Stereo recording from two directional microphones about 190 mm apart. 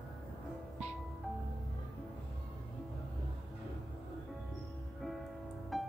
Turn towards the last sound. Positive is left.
turn(degrees=0)  # may be behind; listen again after turning